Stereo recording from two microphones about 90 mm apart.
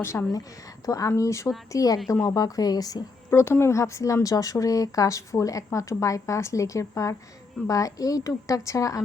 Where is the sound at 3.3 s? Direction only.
25° left (ahead or behind).